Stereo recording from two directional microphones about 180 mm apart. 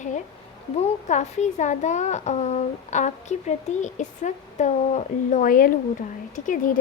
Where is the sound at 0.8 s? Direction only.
40° left (ahead or behind).